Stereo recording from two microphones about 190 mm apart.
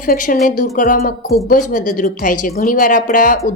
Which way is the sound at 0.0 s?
45° left (ahead or behind).